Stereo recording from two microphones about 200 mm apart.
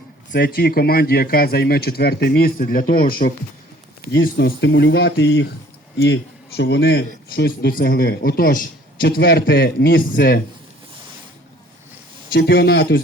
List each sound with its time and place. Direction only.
0.3 s speech: 55° left (ahead or behind)
6.6 s speech: 60° left (ahead or behind)
12.3 s speech: 55° left (ahead or behind)